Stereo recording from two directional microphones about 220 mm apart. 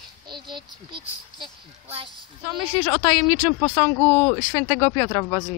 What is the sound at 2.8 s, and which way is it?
Speech, 20° left (ahead or behind).